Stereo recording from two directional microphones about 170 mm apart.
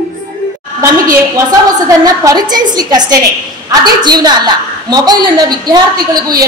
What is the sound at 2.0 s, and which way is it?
A woman's voice, 20° right (ahead or behind).